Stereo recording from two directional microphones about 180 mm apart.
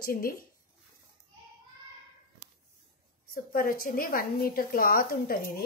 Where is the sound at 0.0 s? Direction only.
55° left (ahead or behind).